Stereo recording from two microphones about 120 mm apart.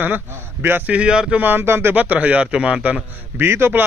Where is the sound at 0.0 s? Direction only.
15° right (ahead or behind).